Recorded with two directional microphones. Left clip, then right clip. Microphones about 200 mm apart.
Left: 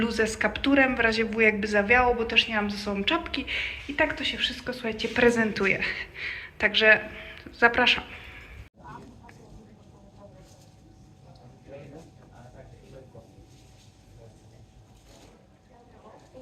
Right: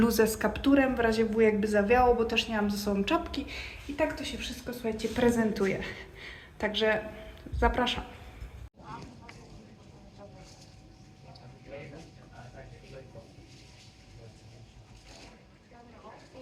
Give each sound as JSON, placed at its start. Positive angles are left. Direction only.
{"t": 0.0, "sound": "speech", "side_deg": -40}
{"t": 0.3, "sound": "speech", "side_deg": -30}
{"t": 3.4, "sound": "a woman's voice", "side_deg": 0}